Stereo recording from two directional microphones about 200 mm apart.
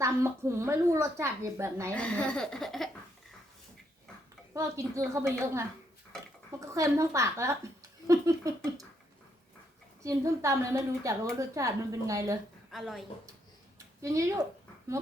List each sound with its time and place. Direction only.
0.0 s a woman's voice: 15° right (ahead or behind)
1.9 s speech: 5° left (ahead or behind)
4.5 s a woman's voice: 15° right (ahead or behind)
6.7 s a woman's voice: 15° right (ahead or behind)
10.0 s a woman's voice: 15° right (ahead or behind)
12.7 s speech: centre (ahead or behind)
13.7 s a sound: 15° right (ahead or behind)